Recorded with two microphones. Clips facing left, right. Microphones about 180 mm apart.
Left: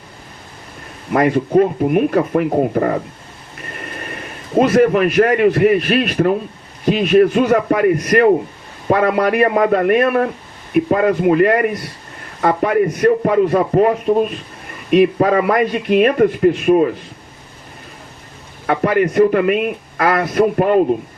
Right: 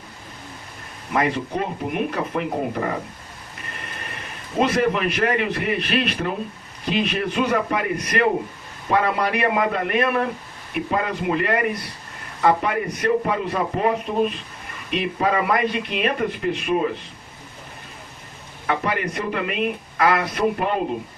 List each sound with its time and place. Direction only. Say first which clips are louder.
1.1 s a man's voice: left 9 dB; 50° left (ahead or behind)
4.5 s a man's voice: left 8 dB; 50° left (ahead or behind)
14.8 s a man's voice: left 10 dB; 45° left (ahead or behind)
18.6 s a man's voice: left 9 dB; 45° left (ahead or behind)